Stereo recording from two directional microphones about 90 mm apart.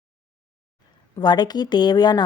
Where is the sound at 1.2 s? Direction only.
50° left (ahead or behind).